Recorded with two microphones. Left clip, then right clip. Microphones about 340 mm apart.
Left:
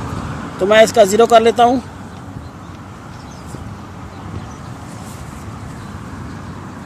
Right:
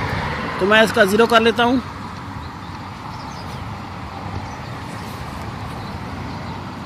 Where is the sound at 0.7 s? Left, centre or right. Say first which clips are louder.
Left 5 dB; left.